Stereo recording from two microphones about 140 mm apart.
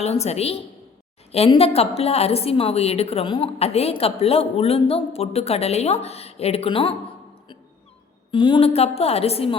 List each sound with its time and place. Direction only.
0.0 s a woman's voice: 50° left (ahead or behind)
8.3 s a woman's voice: 35° left (ahead or behind)